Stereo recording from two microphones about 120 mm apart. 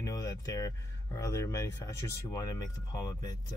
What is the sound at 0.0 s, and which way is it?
Speech, 30° left (ahead or behind).